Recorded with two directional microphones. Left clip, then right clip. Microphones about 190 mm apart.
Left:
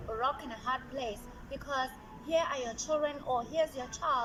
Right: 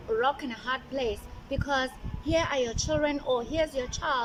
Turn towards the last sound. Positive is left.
turn(degrees=-20)  # may be behind; listen again after turning